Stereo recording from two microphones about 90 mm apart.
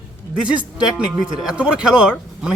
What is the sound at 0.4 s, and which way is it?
Speech, 15° right (ahead or behind).